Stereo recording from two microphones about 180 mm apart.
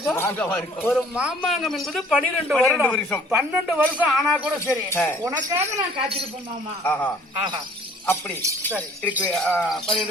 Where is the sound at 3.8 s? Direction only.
5° left (ahead or behind).